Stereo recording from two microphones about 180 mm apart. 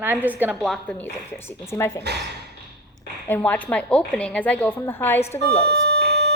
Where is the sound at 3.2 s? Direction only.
10° left (ahead or behind).